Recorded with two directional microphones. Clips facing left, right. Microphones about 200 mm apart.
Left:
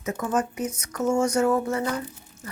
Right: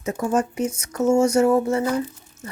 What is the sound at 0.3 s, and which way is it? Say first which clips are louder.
A woman's voice: right 4 dB; 30° right (ahead or behind).